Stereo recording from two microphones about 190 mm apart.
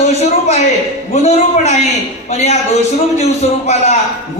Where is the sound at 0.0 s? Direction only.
35° left (ahead or behind).